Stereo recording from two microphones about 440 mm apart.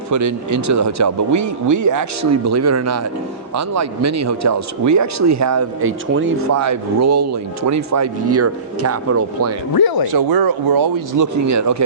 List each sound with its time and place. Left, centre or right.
0.1 s speech: right
9.7 s speech: left
10.2 s speech: right